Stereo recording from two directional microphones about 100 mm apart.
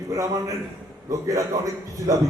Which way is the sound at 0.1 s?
35° right (ahead or behind).